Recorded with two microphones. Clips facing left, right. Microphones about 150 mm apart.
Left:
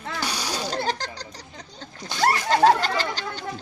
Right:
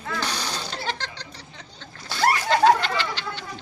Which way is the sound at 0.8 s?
40° left (ahead or behind).